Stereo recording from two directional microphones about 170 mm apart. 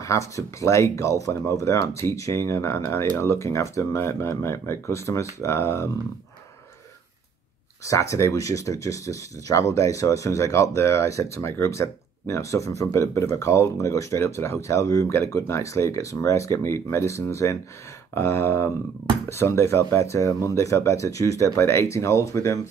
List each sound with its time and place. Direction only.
0.0 s speech: 15° left (ahead or behind)
7.8 s speech: 20° left (ahead or behind)